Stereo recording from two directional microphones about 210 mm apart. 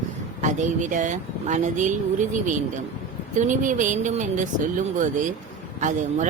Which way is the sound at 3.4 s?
35° right (ahead or behind).